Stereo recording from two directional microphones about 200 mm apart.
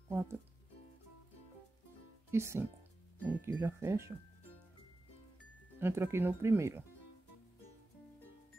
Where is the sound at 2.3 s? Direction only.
15° right (ahead or behind).